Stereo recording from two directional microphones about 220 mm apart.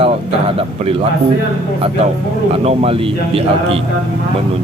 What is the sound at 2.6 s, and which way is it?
A man's voice, 25° right (ahead or behind).